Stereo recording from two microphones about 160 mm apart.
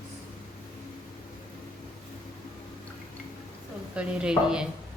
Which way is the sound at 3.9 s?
5° right (ahead or behind).